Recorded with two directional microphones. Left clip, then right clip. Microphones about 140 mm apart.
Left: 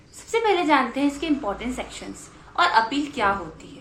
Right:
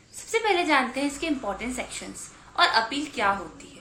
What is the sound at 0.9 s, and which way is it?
A woman's voice, 25° right (ahead or behind).